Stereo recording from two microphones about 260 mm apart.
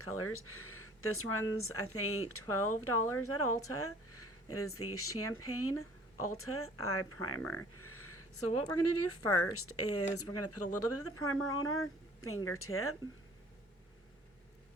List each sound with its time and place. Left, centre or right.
0.0 s speech: left